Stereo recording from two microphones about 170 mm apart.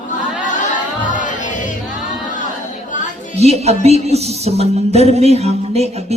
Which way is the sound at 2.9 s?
50° left (ahead or behind).